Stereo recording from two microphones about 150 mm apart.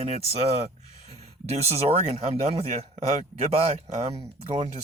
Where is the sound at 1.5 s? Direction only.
45° right (ahead or behind).